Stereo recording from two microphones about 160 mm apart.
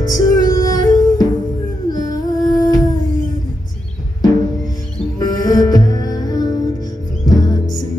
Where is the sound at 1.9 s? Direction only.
25° left (ahead or behind).